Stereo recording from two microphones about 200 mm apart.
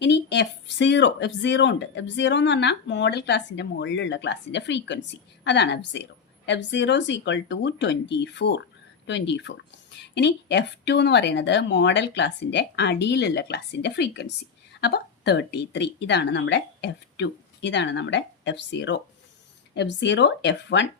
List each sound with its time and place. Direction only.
0.0 s speech: 60° left (ahead or behind)